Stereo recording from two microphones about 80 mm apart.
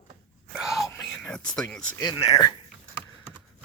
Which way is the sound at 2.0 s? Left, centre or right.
Left.